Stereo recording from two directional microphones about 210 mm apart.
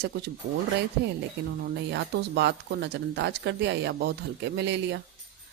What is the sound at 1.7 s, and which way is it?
Speech, 50° right (ahead or behind).